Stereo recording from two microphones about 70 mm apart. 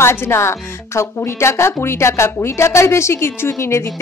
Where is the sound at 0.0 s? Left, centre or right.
Left.